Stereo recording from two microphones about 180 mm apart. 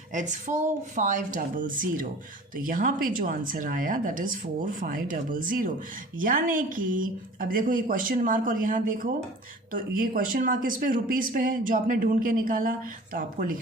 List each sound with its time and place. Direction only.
0.1 s speech: 45° right (ahead or behind)